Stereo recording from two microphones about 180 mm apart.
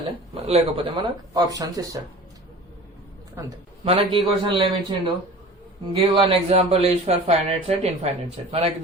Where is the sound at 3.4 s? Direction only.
15° right (ahead or behind).